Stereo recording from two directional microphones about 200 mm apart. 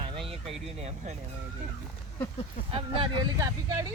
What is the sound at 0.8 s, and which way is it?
Speech, 35° right (ahead or behind).